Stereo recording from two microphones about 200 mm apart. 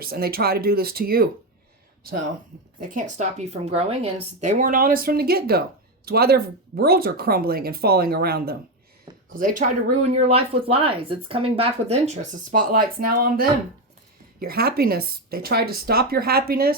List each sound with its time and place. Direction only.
0.0 s speech: 50° right (ahead or behind)
2.9 s speech: 35° right (ahead or behind)